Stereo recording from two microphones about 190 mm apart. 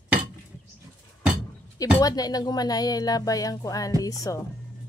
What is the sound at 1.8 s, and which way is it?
A child's voice, 20° left (ahead or behind).